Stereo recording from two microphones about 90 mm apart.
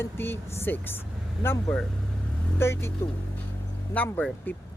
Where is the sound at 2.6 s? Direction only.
30° left (ahead or behind).